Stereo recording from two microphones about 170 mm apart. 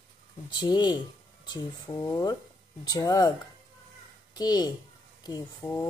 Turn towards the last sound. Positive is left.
turn(degrees=20)  # may be behind; listen again after turning